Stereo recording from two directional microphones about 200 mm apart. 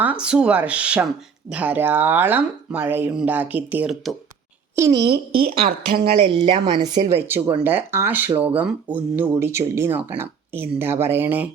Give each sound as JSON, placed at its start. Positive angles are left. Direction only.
{"t": 0.0, "sound": "a woman's voice", "side_deg": -5}
{"t": 5.0, "sound": "a woman's voice", "side_deg": -50}
{"t": 6.4, "sound": "speech", "side_deg": -25}